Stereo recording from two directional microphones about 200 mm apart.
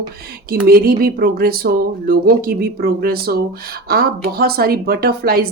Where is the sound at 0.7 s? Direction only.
45° right (ahead or behind).